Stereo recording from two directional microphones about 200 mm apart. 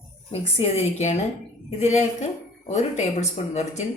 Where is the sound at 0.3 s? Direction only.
30° left (ahead or behind).